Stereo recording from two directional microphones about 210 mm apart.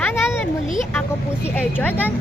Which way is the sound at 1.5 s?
10° left (ahead or behind).